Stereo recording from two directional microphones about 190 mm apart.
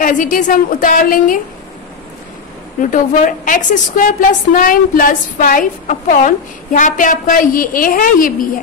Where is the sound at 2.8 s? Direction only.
45° left (ahead or behind).